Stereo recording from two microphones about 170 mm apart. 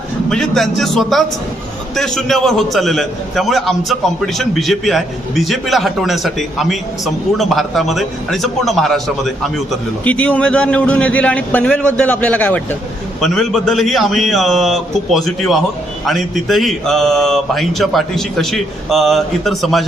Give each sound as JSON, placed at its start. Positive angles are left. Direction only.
{"t": 0.3, "sound": "a man's voice", "side_deg": 0}